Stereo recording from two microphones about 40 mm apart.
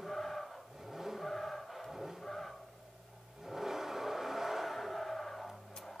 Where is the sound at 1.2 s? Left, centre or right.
Centre.